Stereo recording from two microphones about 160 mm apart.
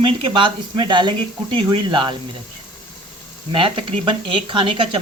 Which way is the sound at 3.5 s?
35° right (ahead or behind).